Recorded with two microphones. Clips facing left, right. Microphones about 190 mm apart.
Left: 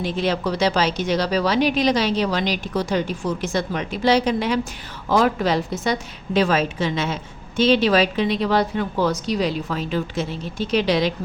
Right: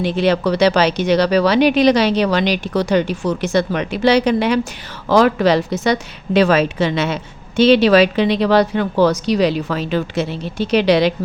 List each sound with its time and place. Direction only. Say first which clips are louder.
0.0 s a woman's voice: right 6 dB; 70° right (ahead or behind)
5.0 s a woman's voice: right 6 dB; 80° right